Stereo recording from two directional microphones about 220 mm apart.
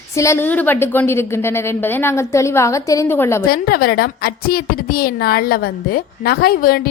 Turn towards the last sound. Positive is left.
turn(degrees=40)  # may be behind; listen again after turning